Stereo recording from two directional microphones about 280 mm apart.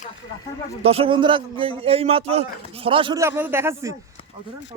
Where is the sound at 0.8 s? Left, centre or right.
Centre.